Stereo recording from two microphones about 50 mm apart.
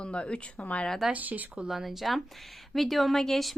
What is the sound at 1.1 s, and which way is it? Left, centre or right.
Speech, right.